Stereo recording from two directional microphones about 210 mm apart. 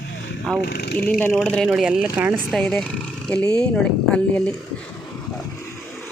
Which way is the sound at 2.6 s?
5° left (ahead or behind).